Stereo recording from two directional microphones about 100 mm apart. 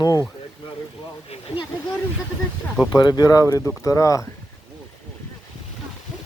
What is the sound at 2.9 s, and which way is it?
Speech, 40° left (ahead or behind).